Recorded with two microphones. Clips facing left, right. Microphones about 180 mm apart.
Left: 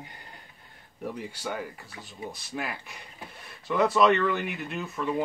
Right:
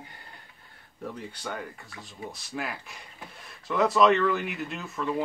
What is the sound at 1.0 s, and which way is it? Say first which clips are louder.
Speech: left 2 dB; 10° left (ahead or behind).